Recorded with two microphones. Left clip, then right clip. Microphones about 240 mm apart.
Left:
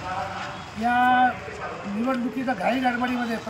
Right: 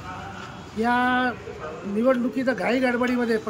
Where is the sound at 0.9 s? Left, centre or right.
Centre.